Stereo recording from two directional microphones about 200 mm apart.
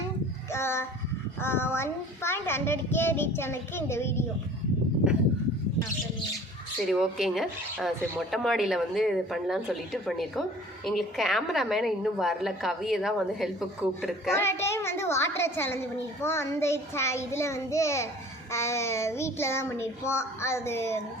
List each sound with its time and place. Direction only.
0.5 s a child's voice: 10° left (ahead or behind)
6.9 s a woman's voice: centre (ahead or behind)
14.3 s a child's voice: 10° left (ahead or behind)